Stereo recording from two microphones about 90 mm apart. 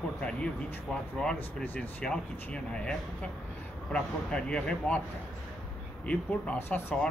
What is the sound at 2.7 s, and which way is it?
Speech, 10° left (ahead or behind).